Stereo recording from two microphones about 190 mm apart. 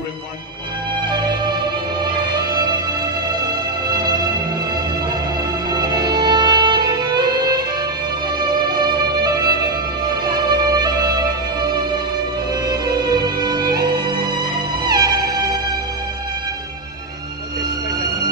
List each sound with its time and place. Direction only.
1.0 s music: 25° right (ahead or behind)
5.7 s music: 20° right (ahead or behind)